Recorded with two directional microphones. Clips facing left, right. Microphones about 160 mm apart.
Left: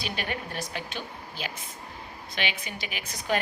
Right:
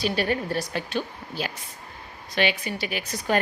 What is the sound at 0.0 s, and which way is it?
A woman's voice, 35° right (ahead or behind).